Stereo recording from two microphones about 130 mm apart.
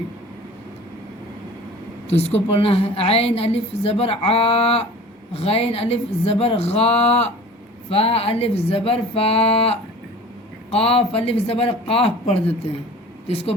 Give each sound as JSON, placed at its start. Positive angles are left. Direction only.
{"t": 2.5, "sound": "a woman's voice", "side_deg": 50}